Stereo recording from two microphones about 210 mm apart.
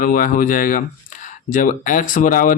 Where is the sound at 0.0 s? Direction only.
40° left (ahead or behind).